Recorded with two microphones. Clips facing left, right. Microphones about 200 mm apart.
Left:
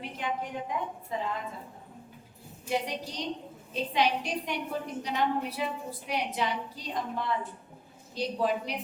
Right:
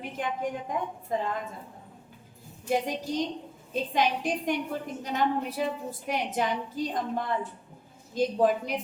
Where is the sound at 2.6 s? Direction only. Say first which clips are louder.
Right 4 dB; 45° right (ahead or behind).